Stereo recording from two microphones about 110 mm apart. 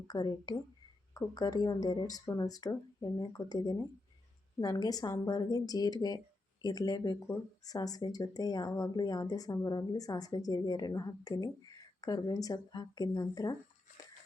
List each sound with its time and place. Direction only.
0.1 s speech: 40° left (ahead or behind)